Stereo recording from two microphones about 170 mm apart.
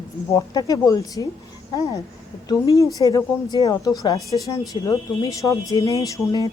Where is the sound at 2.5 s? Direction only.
20° left (ahead or behind).